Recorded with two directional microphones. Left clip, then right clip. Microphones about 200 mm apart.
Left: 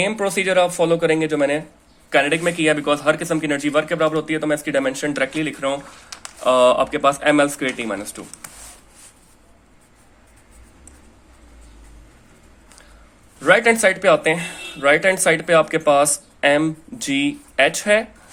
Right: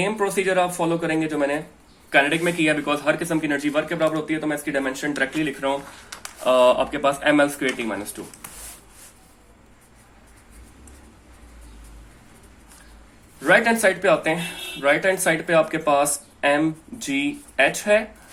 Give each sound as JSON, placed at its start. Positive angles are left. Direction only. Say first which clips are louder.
{"t": 0.0, "sound": "a man's voice", "louder": "left 2 dB", "side_deg": 40}
{"t": 2.0, "sound": "a man's voice", "louder": "left 1 dB", "side_deg": 30}
{"t": 13.4, "sound": "a man's voice", "louder": "left 3 dB", "side_deg": 35}